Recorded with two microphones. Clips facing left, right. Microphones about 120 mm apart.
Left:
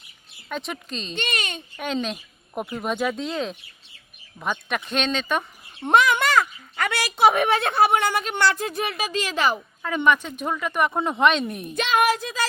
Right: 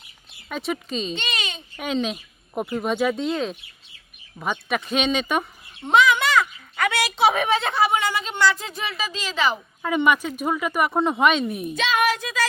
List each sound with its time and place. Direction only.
0.4 s speech: 5° right (ahead or behind)
1.1 s a child's voice: 50° left (ahead or behind)
1.8 s speech: 5° right (ahead or behind)
5.8 s a sound: 50° left (ahead or behind)
7.2 s a woman's voice: 55° left (ahead or behind)
9.8 s speech: 10° right (ahead or behind)
11.8 s speech: 45° left (ahead or behind)